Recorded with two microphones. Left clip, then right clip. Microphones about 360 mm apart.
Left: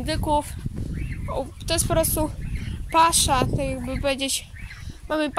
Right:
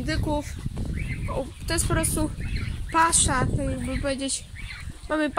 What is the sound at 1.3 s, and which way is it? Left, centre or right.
Speech, centre.